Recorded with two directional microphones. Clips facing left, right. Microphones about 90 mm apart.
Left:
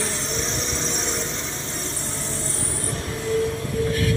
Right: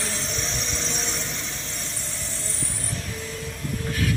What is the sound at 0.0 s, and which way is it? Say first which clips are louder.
Vehicle: left 3 dB; 25° left (ahead or behind).